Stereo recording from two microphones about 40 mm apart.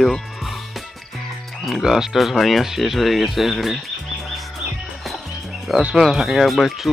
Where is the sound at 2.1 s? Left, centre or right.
Centre.